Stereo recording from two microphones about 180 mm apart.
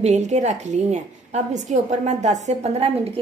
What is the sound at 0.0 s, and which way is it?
A woman's voice, 40° right (ahead or behind).